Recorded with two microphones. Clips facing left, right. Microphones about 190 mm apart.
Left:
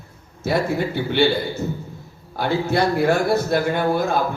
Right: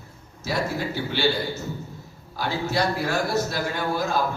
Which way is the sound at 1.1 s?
55° left (ahead or behind).